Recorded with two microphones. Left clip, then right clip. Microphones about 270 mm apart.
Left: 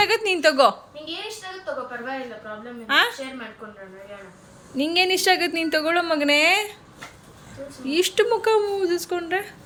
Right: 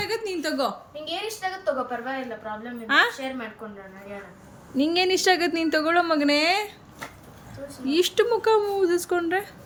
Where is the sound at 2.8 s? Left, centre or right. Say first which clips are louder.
Left 1 dB; centre.